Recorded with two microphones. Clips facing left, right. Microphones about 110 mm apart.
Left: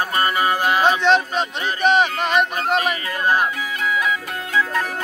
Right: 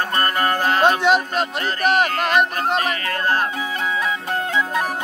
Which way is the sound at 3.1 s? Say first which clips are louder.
Left 2 dB; 15° left (ahead or behind).